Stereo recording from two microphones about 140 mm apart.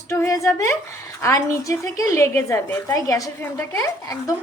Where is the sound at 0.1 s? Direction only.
20° left (ahead or behind).